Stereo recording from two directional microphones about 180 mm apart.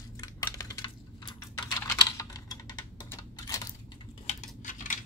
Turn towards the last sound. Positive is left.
turn(degrees=45)  # may be behind; listen again after turning